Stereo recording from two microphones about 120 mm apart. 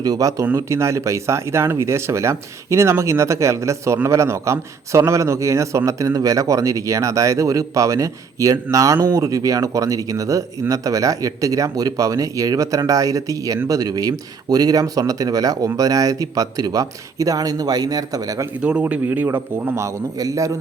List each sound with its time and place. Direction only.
0.0 s speech: 30° right (ahead or behind)
18.6 s speech: 10° right (ahead or behind); by 20.5 s 30° right (ahead or behind)